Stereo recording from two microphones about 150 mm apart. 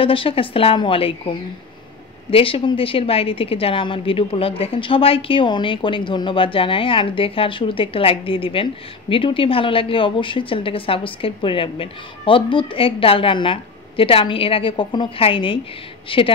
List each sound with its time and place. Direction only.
0.0 s a woman's voice: 35° left (ahead or behind)